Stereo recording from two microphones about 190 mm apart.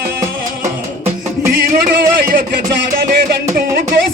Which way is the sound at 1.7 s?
50° right (ahead or behind).